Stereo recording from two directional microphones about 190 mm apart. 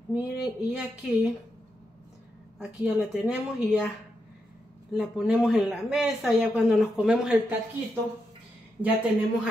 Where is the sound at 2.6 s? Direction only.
5° right (ahead or behind).